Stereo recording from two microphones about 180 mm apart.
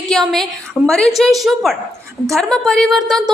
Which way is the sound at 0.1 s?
Centre (ahead or behind).